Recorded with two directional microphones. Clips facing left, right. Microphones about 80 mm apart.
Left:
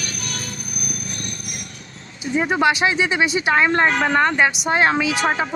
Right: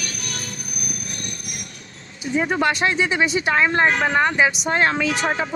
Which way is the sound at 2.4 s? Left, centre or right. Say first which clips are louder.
Left 2 dB; centre.